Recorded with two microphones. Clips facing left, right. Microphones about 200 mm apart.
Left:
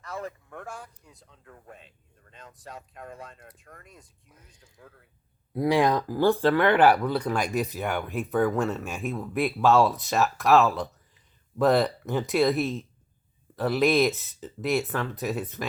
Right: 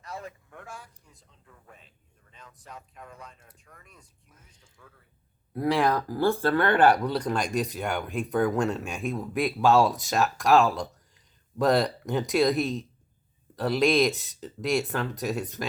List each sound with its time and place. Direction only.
0.2 s a man's voice: 50° left (ahead or behind)
1.0 s speech: 70° left (ahead or behind)
3.0 s a man's voice: 50° left (ahead or behind)
5.5 s speech: 15° left (ahead or behind)